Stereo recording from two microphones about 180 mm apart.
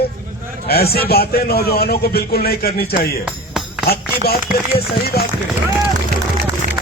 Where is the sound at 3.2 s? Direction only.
5° right (ahead or behind).